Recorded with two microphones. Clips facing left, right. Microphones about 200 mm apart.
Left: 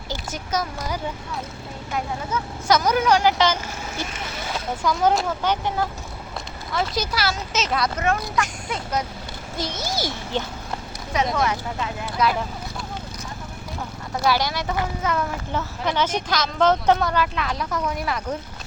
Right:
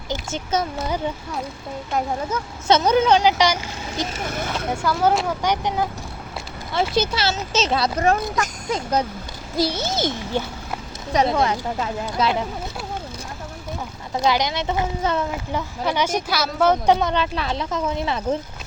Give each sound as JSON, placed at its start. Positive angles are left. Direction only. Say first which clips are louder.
{"t": 0.1, "sound": "speech", "louder": "right 3 dB", "side_deg": -25}
{"t": 2.3, "sound": "speech", "louder": "even", "side_deg": -40}
{"t": 2.6, "sound": "speech", "louder": "right 3 dB", "side_deg": -25}
{"t": 4.2, "sound": "speech", "louder": "right 6 dB", "side_deg": -50}
{"t": 4.8, "sound": "a woman's voice", "louder": "even", "side_deg": -5}
{"t": 6.7, "sound": "speech", "louder": "right 4 dB", "side_deg": -25}
{"t": 11.1, "sound": "speech", "louder": "right 3 dB", "side_deg": -35}
{"t": 14.2, "sound": "speech", "louder": "right 2 dB", "side_deg": -20}
{"t": 15.5, "sound": "a woman's voice", "louder": "right 1 dB", "side_deg": -10}